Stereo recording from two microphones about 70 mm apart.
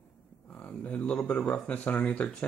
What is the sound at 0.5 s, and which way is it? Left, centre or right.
Speech, left.